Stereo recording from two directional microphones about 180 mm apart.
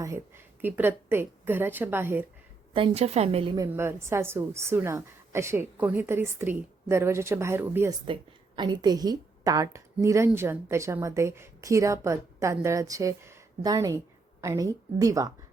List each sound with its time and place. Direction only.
0.6 s a woman's voice: 10° right (ahead or behind)
2.7 s a woman's voice: 30° right (ahead or behind)
3.6 s a woman's voice: 15° right (ahead or behind)
8.0 s a woman's voice: 25° right (ahead or behind)